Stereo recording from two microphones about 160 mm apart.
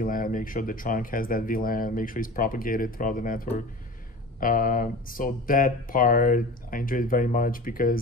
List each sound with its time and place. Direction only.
0.0 s speech: 60° left (ahead or behind)